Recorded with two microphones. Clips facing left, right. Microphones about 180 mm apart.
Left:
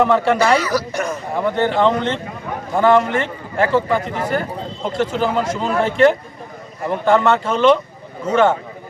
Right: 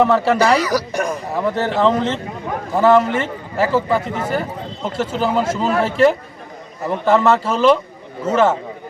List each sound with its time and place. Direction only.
0.0 s a man's voice: centre (ahead or behind)
0.8 s speech: 15° right (ahead or behind)
1.3 s a man's voice: centre (ahead or behind)